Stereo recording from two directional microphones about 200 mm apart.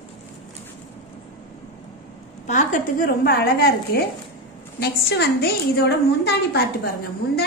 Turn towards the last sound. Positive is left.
turn(degrees=50)  # may be behind; listen again after turning